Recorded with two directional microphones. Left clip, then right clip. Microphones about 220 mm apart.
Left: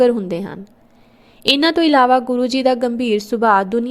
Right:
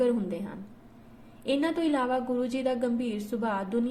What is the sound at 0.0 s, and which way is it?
A woman's voice, 40° left (ahead or behind).